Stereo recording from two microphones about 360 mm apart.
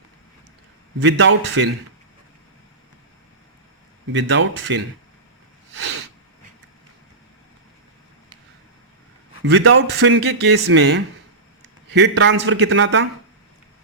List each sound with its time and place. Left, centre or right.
1.0 s speech: right
4.1 s speech: right
5.7 s sneeze: right
9.4 s speech: right